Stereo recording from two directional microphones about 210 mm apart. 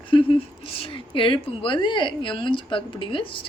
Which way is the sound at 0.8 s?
25° left (ahead or behind).